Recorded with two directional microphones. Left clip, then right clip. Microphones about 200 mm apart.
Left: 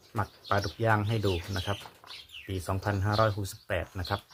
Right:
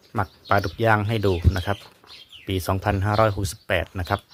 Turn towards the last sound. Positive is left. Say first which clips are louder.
# right 8 dB
turn(degrees=-40)  # may be behind; listen again after turning